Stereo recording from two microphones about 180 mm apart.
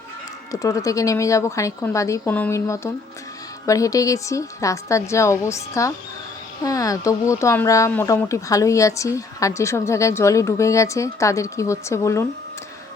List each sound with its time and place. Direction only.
0.5 s speech: 20° left (ahead or behind)